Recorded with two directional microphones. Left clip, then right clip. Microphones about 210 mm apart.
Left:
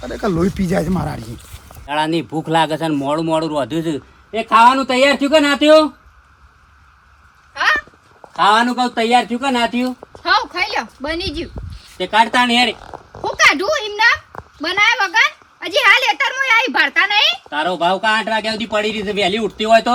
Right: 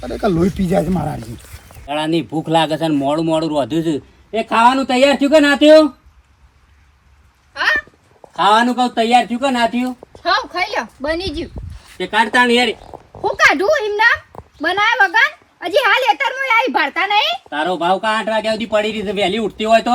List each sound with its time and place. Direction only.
0.2 s a woman's voice: 5° left (ahead or behind)
7.5 s a sound: centre (ahead or behind)
8.4 s a woman's voice: centre (ahead or behind)
12.8 s zipper: 25° right (ahead or behind)
13.2 s a child's voice: centre (ahead or behind)